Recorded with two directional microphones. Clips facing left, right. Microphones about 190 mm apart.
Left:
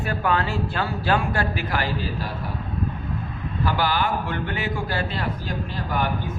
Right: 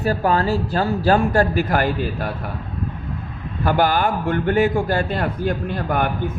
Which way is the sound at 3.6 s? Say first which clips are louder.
Right 6 dB; 50° right (ahead or behind).